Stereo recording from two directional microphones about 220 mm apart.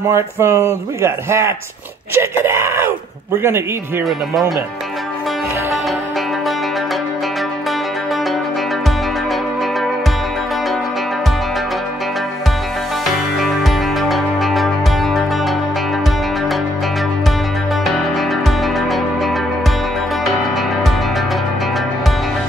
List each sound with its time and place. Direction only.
0.1 s speech: 10° right (ahead or behind)
13.0 s music: centre (ahead or behind)
18.8 s music: centre (ahead or behind)